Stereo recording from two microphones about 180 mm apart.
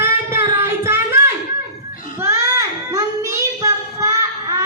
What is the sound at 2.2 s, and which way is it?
Child singing, 15° right (ahead or behind).